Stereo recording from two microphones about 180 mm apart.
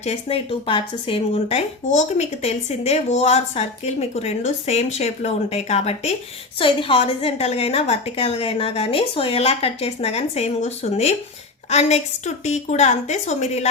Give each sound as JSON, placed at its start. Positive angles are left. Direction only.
{"t": 0.0, "sound": "speech", "side_deg": 35}